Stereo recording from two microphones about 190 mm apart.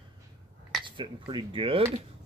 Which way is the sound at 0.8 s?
25° right (ahead or behind).